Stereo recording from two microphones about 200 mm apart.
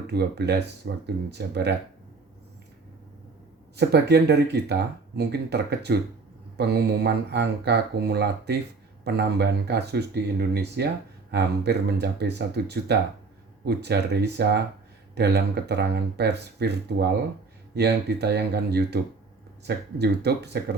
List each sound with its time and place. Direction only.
0.1 s speech: 55° right (ahead or behind)
3.8 s speech: 55° right (ahead or behind)